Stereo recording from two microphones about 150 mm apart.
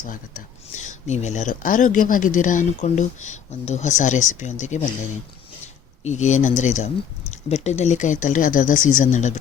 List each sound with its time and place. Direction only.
0.0 s speech: 60° left (ahead or behind)
6.0 s speech: 50° left (ahead or behind)